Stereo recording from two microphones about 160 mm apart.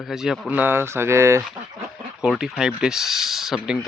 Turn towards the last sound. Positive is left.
turn(degrees=-5)  # may be behind; listen again after turning